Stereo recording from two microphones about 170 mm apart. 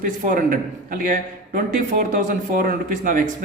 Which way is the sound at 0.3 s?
55° right (ahead or behind).